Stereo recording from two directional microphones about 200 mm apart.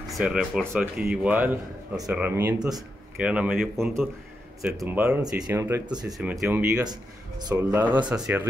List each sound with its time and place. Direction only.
0.1 s a man's voice: 5° right (ahead or behind)
6.0 s a man's voice: centre (ahead or behind)
6.9 s speech: 20° right (ahead or behind)
7.5 s speech: 10° right (ahead or behind)